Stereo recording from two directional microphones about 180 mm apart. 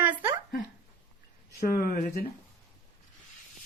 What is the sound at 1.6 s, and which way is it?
Speech, 55° left (ahead or behind).